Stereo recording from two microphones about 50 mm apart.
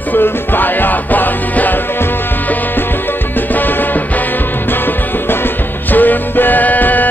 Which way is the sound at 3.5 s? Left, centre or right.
Left.